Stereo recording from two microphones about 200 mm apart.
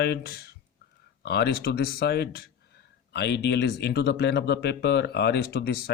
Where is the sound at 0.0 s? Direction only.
55° left (ahead or behind).